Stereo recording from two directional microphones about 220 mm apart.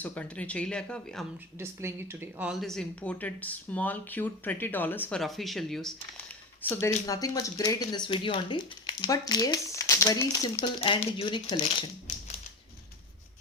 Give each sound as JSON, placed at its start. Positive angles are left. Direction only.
{"t": 0.0, "sound": "speech", "side_deg": 5}
{"t": 1.5, "sound": "speech", "side_deg": -10}